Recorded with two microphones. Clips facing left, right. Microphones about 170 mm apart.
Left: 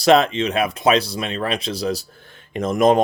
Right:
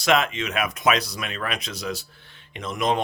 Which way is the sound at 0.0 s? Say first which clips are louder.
Left 7 dB; 35° left (ahead or behind).